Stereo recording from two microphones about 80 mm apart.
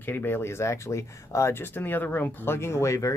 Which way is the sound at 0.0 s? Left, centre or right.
Left.